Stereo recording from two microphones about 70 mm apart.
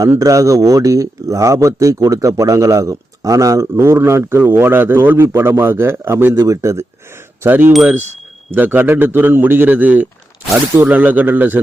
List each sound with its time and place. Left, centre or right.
0.2 s a man's voice: right
6.4 s speech: right
7.4 s a man's voice: right